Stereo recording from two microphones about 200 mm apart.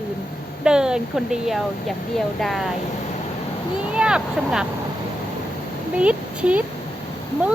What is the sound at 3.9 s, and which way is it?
Speech, 5° right (ahead or behind).